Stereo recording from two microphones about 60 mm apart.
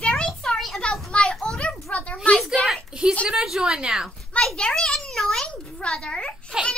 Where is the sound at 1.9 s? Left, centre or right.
Left.